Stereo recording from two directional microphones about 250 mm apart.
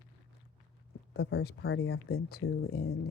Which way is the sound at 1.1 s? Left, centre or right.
Left.